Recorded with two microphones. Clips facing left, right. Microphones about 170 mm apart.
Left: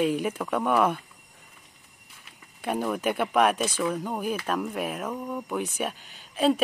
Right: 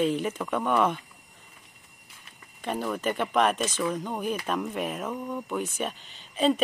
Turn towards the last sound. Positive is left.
turn(degrees=5)  # may be behind; listen again after turning